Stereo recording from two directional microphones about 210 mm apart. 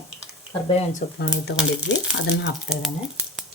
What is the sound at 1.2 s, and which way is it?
Speech, 55° left (ahead or behind).